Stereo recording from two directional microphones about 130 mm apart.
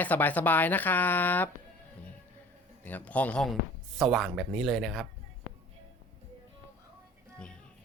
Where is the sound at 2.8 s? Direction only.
10° left (ahead or behind).